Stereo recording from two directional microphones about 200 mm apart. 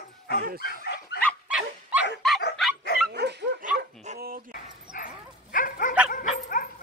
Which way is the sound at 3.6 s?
40° right (ahead or behind).